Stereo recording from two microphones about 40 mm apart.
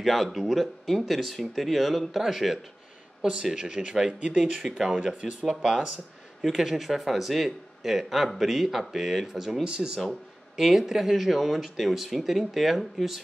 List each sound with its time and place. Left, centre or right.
0.0 s a man's voice: centre
3.2 s speech: centre
5.0 s a man's voice: right; by 13.2 s centre